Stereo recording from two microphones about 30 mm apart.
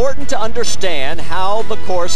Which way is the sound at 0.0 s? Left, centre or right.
Centre.